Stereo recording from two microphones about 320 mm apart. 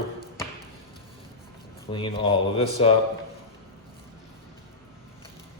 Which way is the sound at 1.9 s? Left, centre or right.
Centre.